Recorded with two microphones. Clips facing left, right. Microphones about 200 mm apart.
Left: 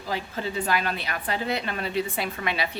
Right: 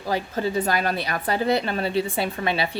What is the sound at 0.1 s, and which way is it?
A woman's voice, 40° right (ahead or behind).